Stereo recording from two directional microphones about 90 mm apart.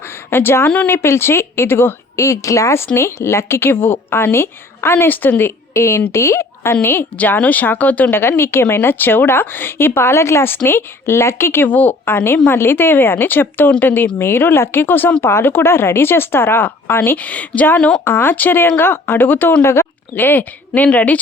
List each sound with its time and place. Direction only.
0.3 s a woman's voice: 25° left (ahead or behind)
18.0 s a woman's voice: 25° left (ahead or behind)